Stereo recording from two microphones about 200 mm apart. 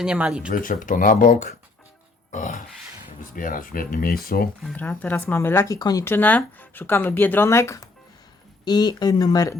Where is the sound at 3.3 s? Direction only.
45° left (ahead or behind).